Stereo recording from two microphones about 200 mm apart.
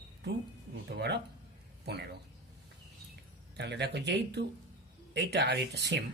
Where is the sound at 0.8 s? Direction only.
55° right (ahead or behind).